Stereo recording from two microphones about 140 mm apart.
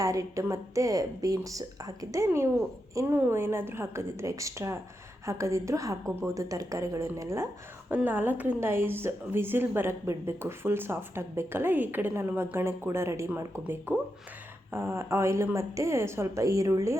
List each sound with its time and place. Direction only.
0.0 s a woman's voice: 25° right (ahead or behind)